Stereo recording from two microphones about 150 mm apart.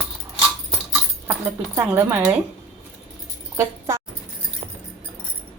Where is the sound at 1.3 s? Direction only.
15° right (ahead or behind).